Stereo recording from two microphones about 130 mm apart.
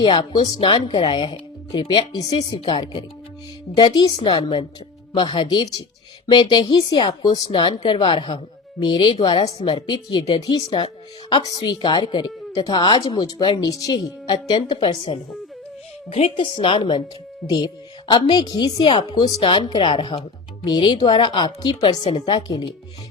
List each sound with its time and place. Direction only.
0.0 s speech: 40° left (ahead or behind)
16.0 s a woman's voice: 55° left (ahead or behind)
16.3 s speech: 40° left (ahead or behind)